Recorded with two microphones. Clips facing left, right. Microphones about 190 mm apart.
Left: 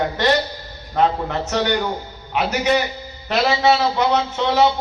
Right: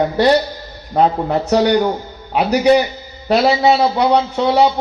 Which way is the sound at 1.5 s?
35° right (ahead or behind).